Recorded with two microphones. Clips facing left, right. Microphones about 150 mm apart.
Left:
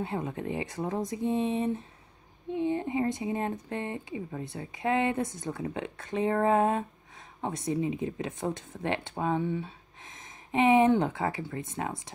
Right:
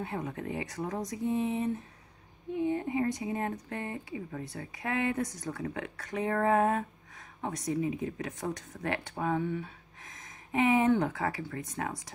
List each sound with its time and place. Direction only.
0.0 s speech: 25° left (ahead or behind)